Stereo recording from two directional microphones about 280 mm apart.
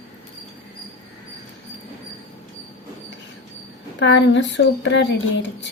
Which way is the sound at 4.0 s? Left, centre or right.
Left.